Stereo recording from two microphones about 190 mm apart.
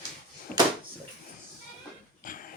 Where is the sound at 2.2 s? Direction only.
45° left (ahead or behind).